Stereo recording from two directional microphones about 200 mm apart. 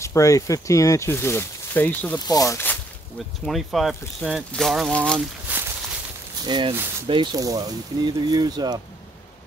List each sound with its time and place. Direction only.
0.0 s speech: 15° left (ahead or behind)
3.4 s speech: centre (ahead or behind)
5.5 s a sound: 10° right (ahead or behind)
6.4 s speech: 20° right (ahead or behind)